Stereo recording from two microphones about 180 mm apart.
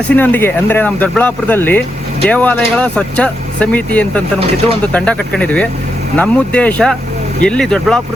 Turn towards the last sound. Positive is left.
turn(degrees=5)  # may be behind; listen again after turning